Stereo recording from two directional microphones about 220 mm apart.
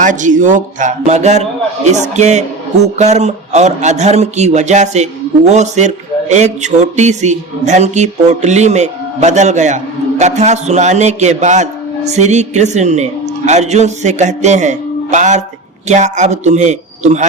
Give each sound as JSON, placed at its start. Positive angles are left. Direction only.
{"t": 0.0, "sound": "speech", "side_deg": -35}